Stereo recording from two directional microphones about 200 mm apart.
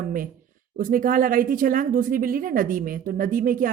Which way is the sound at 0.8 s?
45° right (ahead or behind).